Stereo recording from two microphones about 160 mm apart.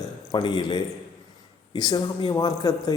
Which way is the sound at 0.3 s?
25° left (ahead or behind).